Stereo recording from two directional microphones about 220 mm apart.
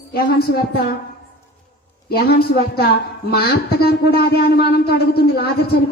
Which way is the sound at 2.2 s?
45° left (ahead or behind).